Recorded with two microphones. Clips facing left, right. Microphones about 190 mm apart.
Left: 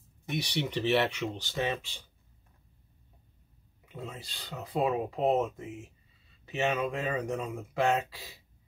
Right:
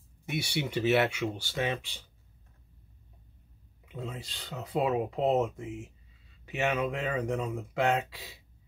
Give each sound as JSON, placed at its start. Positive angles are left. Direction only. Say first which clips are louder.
{"t": 0.3, "sound": "speech", "louder": "even", "side_deg": -10}
{"t": 3.9, "sound": "speech", "louder": "right 2 dB", "side_deg": -20}